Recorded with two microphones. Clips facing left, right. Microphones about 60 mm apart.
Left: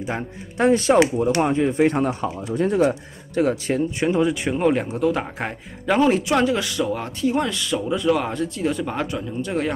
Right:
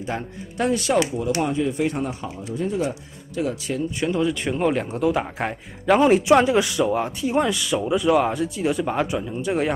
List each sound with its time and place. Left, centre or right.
0.6 s speech: left
2.9 s speech: left
4.0 s speech: left
4.3 s speech: centre
5.9 s speech: centre